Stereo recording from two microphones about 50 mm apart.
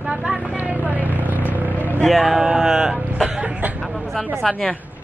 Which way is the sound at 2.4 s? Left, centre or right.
Centre.